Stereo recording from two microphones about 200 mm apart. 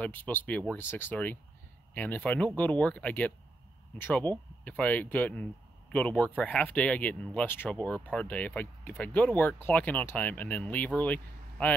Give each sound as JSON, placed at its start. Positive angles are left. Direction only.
{"t": 0.0, "sound": "speech", "side_deg": 10}